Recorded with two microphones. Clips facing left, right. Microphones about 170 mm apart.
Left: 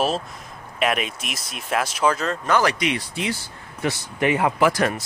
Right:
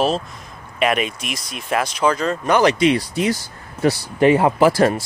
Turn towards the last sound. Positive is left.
turn(degrees=-30)  # may be behind; listen again after turning